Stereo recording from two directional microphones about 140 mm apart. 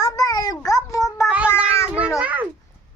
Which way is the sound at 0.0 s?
25° left (ahead or behind).